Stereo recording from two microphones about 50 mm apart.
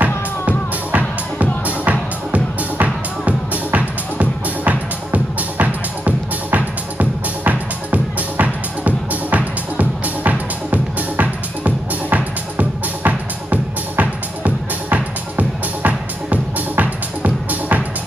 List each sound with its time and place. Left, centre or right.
0.0 s music: right